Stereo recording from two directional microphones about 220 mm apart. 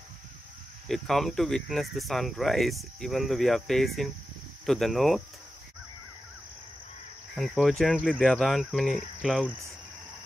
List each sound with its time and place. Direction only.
0.8 s speech: centre (ahead or behind)
7.3 s speech: centre (ahead or behind)